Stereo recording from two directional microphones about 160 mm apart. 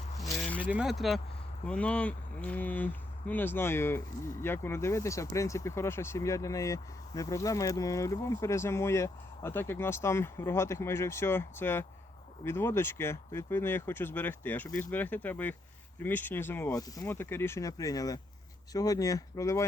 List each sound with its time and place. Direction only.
0.6 s speech: 10° right (ahead or behind); by 19.6 s 20° left (ahead or behind)